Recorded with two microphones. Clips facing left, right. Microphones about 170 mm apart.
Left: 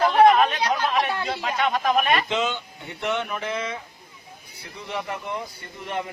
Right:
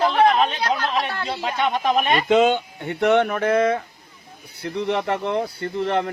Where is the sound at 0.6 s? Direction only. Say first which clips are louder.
Even; 10° left (ahead or behind).